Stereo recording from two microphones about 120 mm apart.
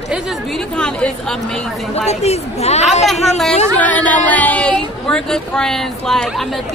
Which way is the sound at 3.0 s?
Centre (ahead or behind).